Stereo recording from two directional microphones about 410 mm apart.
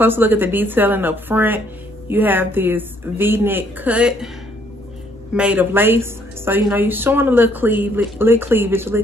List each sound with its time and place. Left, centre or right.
0.0 s a woman's voice: centre
5.3 s a woman's voice: centre